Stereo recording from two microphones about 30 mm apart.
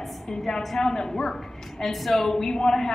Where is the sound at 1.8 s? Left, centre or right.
Centre.